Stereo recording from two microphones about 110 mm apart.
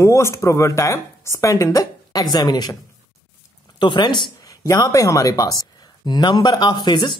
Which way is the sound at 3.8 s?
45° left (ahead or behind).